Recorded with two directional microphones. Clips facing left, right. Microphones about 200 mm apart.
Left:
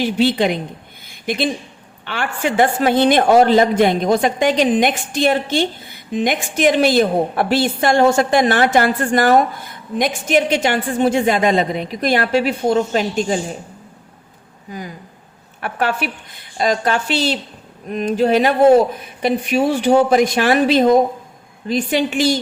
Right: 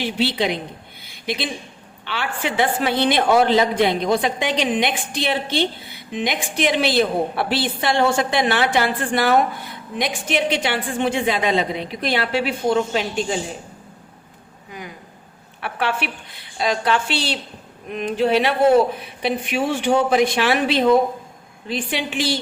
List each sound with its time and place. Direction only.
0.0 s a woman's voice: 45° left (ahead or behind)
1.0 s a sound: 50° left (ahead or behind)
2.0 s a woman's voice: 45° left (ahead or behind)
14.7 s a woman's voice: 35° left (ahead or behind)